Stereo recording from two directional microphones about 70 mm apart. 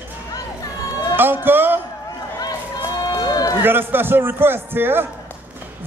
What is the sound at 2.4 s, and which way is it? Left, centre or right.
Run, left.